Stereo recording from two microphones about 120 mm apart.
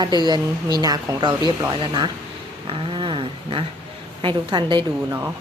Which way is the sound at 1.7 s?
45° right (ahead or behind).